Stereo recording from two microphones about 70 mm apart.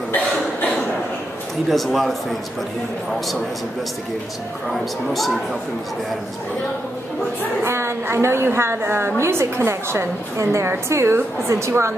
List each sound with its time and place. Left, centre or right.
1.7 s speech: centre
4.7 s speech: centre
7.6 s a woman's voice: right